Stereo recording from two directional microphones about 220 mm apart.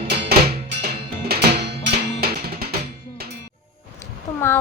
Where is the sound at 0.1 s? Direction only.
45° right (ahead or behind).